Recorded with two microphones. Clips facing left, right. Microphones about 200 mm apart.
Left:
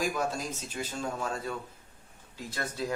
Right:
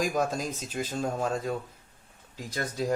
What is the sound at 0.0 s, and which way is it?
Speech, 45° right (ahead or behind).